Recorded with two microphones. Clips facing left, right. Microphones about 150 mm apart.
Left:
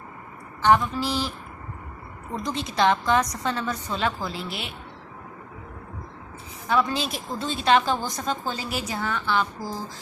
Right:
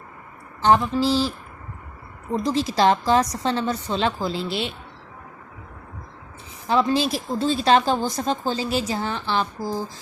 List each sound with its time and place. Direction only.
0.6 s a woman's voice: 30° right (ahead or behind)
2.4 s a woman's voice: 30° right (ahead or behind)
6.7 s speech: 30° right (ahead or behind)